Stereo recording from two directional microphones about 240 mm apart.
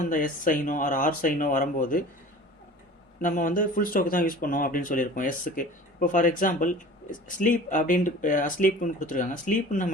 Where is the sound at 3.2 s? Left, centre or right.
Left.